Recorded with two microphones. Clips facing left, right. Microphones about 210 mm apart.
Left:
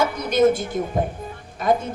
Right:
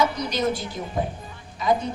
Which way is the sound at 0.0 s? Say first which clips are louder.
Left 6 dB; 50° left (ahead or behind).